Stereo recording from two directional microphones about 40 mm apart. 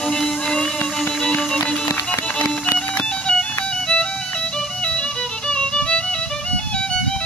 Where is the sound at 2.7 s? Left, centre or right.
Left.